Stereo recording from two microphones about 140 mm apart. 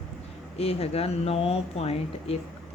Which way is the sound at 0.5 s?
45° left (ahead or behind).